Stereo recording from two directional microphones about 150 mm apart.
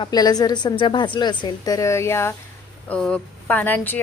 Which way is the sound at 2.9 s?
5° left (ahead or behind).